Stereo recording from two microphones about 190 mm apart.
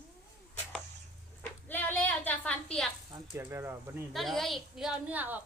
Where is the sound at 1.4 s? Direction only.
10° left (ahead or behind).